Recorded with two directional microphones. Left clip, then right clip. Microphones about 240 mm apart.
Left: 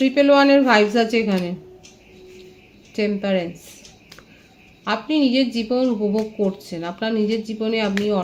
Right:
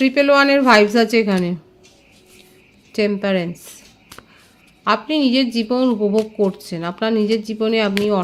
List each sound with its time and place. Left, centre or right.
0.0 s a woman's voice: right
2.9 s a woman's voice: right
4.8 s a woman's voice: right